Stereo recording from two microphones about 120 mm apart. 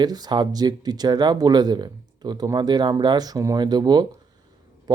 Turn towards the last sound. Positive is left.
turn(degrees=-35)  # may be behind; listen again after turning